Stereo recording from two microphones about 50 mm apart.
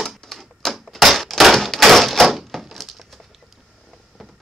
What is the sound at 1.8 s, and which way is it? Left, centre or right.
Door, centre.